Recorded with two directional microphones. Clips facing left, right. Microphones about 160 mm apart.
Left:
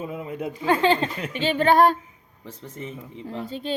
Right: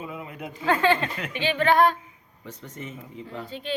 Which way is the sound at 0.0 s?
40° left (ahead or behind).